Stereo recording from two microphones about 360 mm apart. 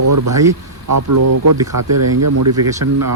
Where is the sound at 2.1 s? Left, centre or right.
Right.